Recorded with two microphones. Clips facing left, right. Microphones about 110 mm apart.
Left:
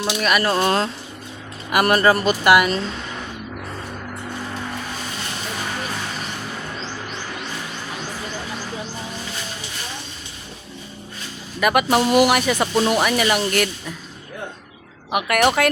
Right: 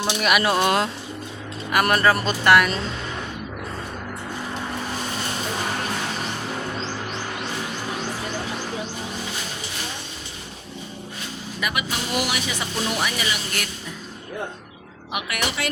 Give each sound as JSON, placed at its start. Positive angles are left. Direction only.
{"t": 0.2, "sound": "speech", "side_deg": -10}
{"t": 1.7, "sound": "speech", "side_deg": 5}
{"t": 11.6, "sound": "speech", "side_deg": 55}
{"t": 15.1, "sound": "a woman's voice", "side_deg": 50}